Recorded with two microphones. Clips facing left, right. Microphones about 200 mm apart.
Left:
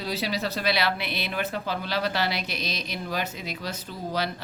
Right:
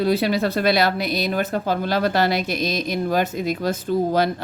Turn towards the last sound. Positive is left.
turn(degrees=-50)  # may be behind; listen again after turning